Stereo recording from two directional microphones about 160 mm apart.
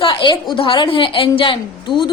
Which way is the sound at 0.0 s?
35° left (ahead or behind).